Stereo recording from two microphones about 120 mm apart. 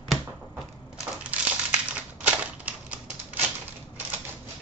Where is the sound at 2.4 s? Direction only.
10° right (ahead or behind).